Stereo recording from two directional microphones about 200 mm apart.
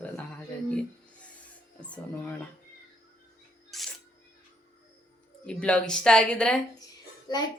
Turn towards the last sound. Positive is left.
turn(degrees=20)  # may be behind; listen again after turning